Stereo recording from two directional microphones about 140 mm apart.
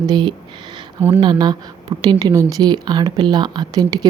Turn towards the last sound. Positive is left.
turn(degrees=-25)  # may be behind; listen again after turning